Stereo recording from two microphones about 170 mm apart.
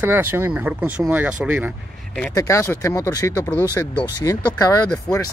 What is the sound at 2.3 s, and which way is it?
Speech, 20° left (ahead or behind).